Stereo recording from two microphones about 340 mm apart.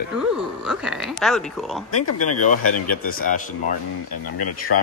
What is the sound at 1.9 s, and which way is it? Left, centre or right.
Speech, left.